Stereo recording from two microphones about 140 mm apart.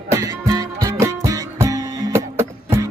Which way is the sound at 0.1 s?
25° right (ahead or behind).